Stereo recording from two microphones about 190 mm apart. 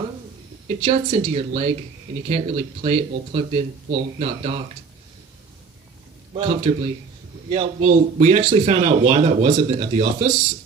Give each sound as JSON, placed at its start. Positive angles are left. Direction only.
{"t": 0.7, "sound": "speech", "side_deg": -30}
{"t": 6.3, "sound": "speech", "side_deg": -30}